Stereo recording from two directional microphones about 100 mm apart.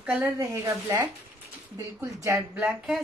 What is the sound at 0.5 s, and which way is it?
Speech, 35° right (ahead or behind).